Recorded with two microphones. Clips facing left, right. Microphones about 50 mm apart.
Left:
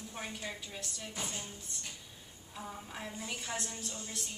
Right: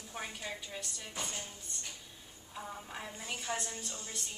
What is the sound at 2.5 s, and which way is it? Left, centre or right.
A woman's voice, centre.